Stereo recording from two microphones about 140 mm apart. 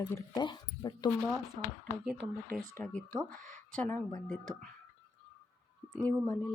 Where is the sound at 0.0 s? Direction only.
25° left (ahead or behind).